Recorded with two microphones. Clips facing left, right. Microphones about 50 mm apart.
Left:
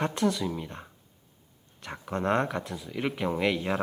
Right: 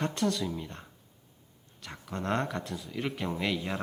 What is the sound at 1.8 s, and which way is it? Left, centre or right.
Speech, left.